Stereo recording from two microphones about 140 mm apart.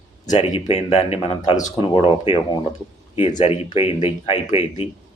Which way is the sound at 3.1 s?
55° left (ahead or behind).